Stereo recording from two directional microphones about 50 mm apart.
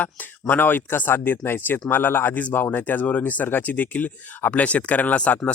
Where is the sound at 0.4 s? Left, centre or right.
Left.